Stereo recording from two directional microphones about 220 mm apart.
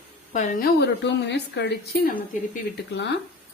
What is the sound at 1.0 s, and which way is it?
Speech, 55° left (ahead or behind).